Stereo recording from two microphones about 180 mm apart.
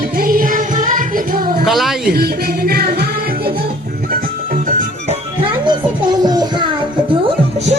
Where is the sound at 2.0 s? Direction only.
60° right (ahead or behind).